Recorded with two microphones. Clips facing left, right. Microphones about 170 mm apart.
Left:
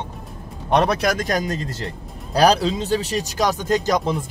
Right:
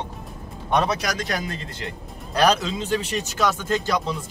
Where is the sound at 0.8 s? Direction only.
60° left (ahead or behind).